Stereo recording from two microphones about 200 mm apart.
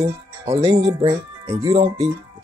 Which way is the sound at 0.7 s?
35° right (ahead or behind).